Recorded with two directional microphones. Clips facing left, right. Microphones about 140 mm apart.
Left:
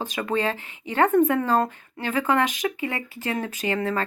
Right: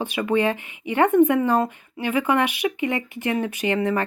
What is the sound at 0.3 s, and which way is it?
Speech, 15° right (ahead or behind).